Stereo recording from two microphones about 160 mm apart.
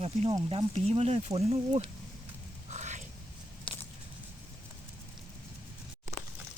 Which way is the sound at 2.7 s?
45° right (ahead or behind).